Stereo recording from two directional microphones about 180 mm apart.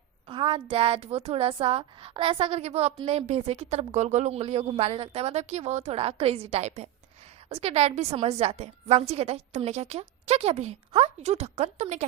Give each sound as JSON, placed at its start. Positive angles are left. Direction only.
{"t": 0.3, "sound": "a woman's voice", "side_deg": -30}